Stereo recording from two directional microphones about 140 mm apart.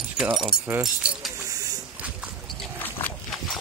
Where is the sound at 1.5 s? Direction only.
25° right (ahead or behind).